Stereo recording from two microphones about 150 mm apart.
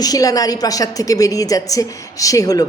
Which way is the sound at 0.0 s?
25° left (ahead or behind).